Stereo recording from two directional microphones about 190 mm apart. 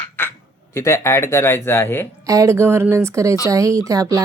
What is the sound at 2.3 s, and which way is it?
Speech, 15° right (ahead or behind).